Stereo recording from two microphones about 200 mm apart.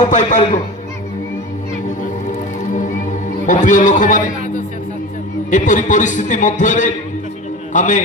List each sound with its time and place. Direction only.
0.1 s a man's voice: 40° left (ahead or behind)
3.4 s a man's voice: 40° left (ahead or behind)
5.5 s a man's voice: 40° left (ahead or behind)